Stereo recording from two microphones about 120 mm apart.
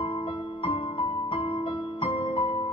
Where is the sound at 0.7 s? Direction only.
50° left (ahead or behind).